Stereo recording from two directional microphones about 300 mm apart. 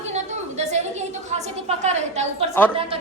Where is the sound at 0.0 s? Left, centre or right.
Right.